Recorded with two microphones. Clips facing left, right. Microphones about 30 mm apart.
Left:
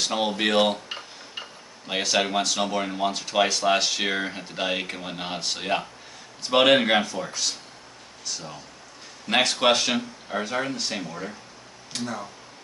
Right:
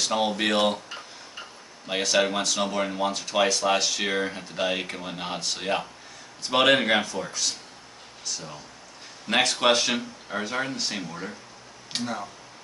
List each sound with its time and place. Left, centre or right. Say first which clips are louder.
0.0 s speech: even; centre
1.9 s speech: right 1 dB; centre
11.9 s speech: right 1 dB; right